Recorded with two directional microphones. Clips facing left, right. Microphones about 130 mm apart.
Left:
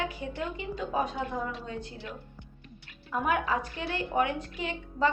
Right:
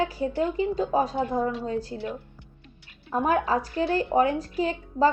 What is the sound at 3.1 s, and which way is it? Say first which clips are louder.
Speech: right 5 dB; 35° right (ahead or behind).